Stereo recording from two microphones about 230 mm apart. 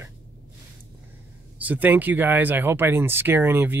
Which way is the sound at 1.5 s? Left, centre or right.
Centre.